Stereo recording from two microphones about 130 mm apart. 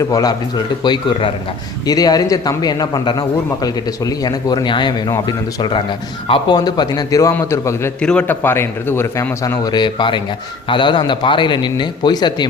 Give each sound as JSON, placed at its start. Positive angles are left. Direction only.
{"t": 0.0, "sound": "a man's voice", "side_deg": 30}
{"t": 8.0, "sound": "a man's voice", "side_deg": 10}